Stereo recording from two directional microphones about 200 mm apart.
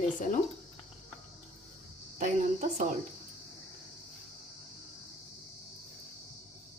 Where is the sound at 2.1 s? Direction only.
35° right (ahead or behind).